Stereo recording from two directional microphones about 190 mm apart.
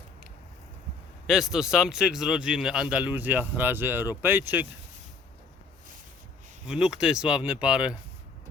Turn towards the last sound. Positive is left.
turn(degrees=-5)  # may be behind; listen again after turning